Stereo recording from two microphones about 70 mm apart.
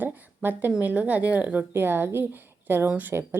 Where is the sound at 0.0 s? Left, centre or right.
Right.